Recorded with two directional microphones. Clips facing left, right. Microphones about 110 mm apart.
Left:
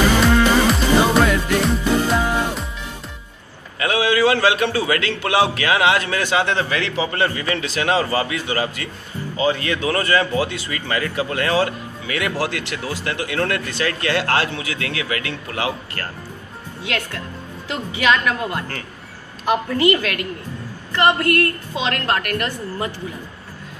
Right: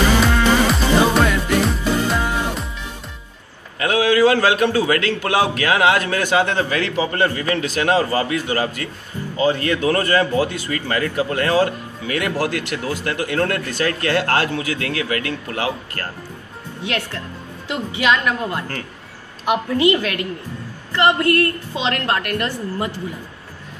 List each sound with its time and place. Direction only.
0.3 s music: centre (ahead or behind)
3.8 s speech: 40° right (ahead or behind)
16.8 s a woman's voice: 20° right (ahead or behind)
19.4 s a woman's voice: 15° right (ahead or behind)